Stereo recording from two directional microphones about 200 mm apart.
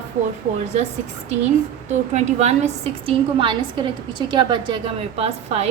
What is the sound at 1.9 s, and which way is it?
A woman's voice, 35° right (ahead or behind).